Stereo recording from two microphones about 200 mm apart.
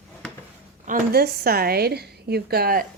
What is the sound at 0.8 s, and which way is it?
A woman's voice, 50° right (ahead or behind).